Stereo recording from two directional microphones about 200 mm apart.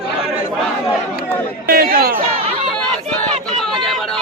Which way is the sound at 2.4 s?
30° right (ahead or behind).